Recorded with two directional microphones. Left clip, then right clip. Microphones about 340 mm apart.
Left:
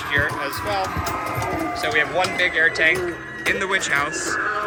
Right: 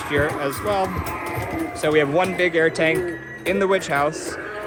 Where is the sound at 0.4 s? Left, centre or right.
Centre.